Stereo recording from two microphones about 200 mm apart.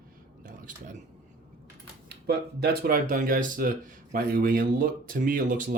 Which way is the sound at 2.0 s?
50° right (ahead or behind).